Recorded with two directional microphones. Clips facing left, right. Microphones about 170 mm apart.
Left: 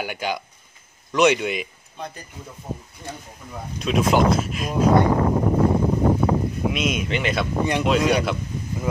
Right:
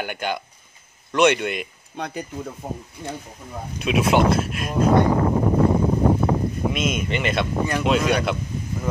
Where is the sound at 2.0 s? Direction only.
80° right.